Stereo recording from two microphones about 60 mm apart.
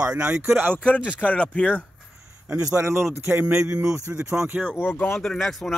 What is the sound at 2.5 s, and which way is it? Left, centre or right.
Speech, right.